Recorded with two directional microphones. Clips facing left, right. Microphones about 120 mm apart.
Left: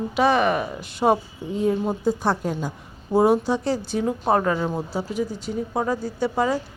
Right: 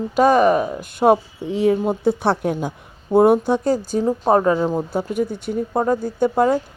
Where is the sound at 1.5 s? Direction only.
70° right (ahead or behind); by 4.2 s 40° right (ahead or behind).